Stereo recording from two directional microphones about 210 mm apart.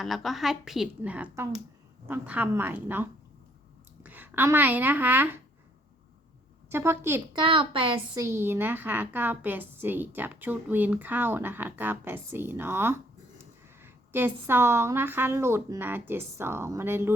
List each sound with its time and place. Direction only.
0.0 s a woman's voice: centre (ahead or behind)
6.7 s a woman's voice: 10° right (ahead or behind)
7.4 s a woman's voice: 25° right (ahead or behind)